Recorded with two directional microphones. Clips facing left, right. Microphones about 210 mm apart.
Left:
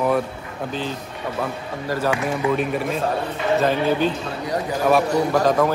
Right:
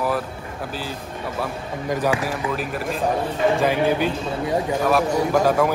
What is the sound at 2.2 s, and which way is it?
Speech, 5° right (ahead or behind).